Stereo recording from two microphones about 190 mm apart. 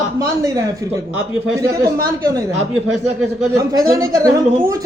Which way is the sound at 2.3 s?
15° right (ahead or behind).